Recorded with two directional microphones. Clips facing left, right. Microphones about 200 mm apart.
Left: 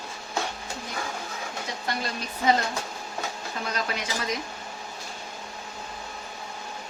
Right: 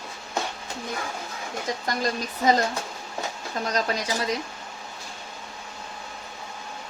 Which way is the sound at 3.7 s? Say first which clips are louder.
Right 5 dB; 40° right (ahead or behind).